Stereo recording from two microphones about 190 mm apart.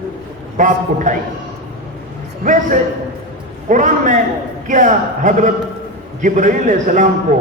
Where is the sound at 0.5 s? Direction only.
45° right (ahead or behind).